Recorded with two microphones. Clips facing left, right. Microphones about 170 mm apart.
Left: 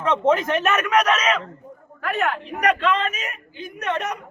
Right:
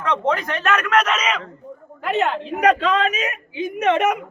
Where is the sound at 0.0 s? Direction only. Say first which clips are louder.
Left 2 dB; 20° left (ahead or behind).